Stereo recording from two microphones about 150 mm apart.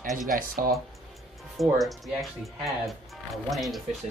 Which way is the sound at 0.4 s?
70° right (ahead or behind).